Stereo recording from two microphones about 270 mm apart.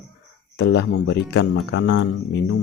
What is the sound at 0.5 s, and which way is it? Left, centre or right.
Speech, left.